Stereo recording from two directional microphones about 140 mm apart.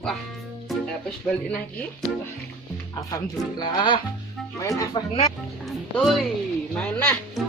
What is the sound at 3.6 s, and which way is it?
A child's voice, 35° left (ahead or behind).